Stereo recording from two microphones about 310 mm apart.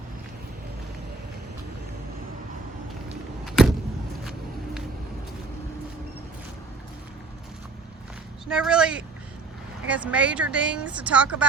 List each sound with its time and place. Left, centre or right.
3.4 s vehicle: centre
4.2 s a sound: centre
8.4 s speech: centre